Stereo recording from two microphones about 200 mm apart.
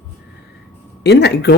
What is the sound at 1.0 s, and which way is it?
Speech, 55° left (ahead or behind).